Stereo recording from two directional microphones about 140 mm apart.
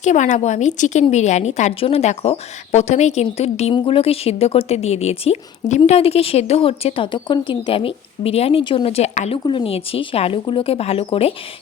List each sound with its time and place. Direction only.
0.0 s a woman's voice: 60° left (ahead or behind)
9.5 s a woman's voice: 40° left (ahead or behind)